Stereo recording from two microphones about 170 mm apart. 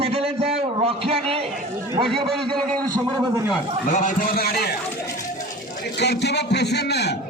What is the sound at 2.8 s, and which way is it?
Speech, 25° right (ahead or behind).